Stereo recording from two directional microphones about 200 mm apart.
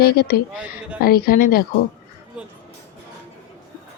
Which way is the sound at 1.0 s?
50° left (ahead or behind).